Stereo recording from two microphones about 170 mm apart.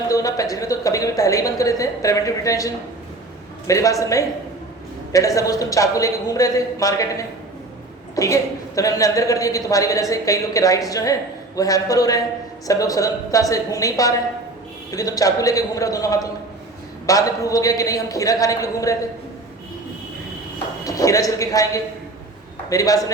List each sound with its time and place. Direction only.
0.1 s a woman's voice: 20° left (ahead or behind)
20.8 s a man's voice: 20° left (ahead or behind)